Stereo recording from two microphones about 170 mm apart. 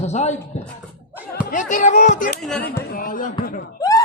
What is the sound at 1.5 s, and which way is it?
Speech, 50° left (ahead or behind).